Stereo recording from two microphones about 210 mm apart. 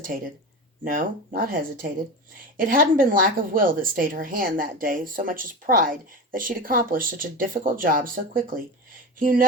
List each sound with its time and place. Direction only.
0.1 s speech: 40° right (ahead or behind)